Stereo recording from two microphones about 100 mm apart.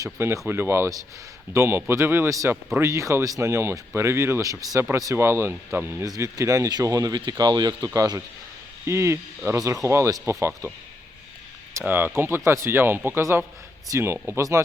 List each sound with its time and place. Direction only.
0.0 s speech: 25° right (ahead or behind)
5.1 s speech: 25° right (ahead or behind)
6.1 s a man's voice: 35° right (ahead or behind)
8.9 s speech: 30° right (ahead or behind)
11.7 s speech: 20° right (ahead or behind)